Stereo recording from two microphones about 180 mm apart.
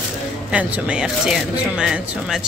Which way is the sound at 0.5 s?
5° right (ahead or behind).